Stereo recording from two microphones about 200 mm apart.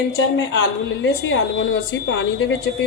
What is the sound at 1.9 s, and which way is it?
Speech, 60° left (ahead or behind).